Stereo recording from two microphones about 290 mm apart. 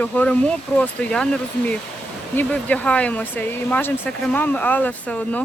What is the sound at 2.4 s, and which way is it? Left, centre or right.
Speech, centre.